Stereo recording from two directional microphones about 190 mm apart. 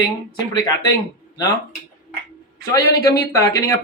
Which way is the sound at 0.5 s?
20° left (ahead or behind).